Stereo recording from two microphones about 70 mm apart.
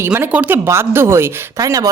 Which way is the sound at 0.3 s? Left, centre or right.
Right.